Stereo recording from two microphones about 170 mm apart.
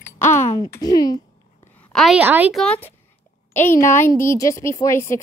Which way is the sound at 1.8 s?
5° left (ahead or behind).